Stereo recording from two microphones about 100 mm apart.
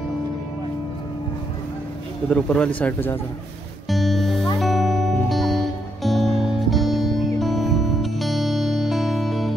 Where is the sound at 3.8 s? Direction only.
Centre (ahead or behind).